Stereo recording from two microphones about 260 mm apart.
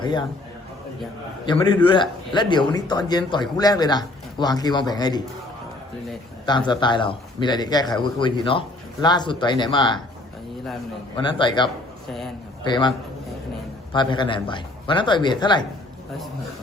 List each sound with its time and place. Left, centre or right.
0.0 s a man's voice: centre
1.5 s a man's voice: centre
6.4 s a man's voice: centre
11.2 s a man's voice: centre
13.9 s a man's voice: centre